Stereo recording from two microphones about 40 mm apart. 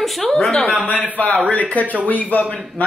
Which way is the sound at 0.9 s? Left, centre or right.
Left.